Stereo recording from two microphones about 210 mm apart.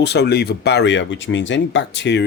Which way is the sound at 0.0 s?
50° left (ahead or behind).